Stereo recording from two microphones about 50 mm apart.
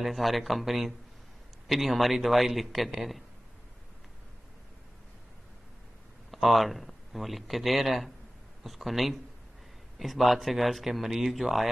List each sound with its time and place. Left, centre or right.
0.0 s speech: centre
6.3 s speech: centre